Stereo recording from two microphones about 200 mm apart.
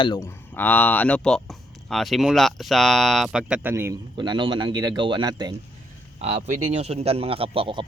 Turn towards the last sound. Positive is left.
turn(degrees=-25)  # may be behind; listen again after turning